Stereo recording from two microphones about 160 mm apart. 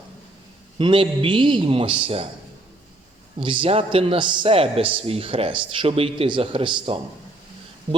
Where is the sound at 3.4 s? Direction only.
30° right (ahead or behind).